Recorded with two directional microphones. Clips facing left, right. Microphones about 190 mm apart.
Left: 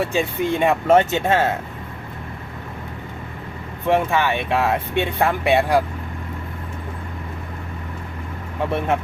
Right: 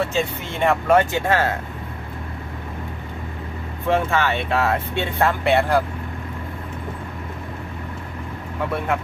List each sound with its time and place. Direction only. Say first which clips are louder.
0.0 s speech: left 2 dB; 15° left (ahead or behind)
3.8 s speech: left 1 dB; 15° left (ahead or behind)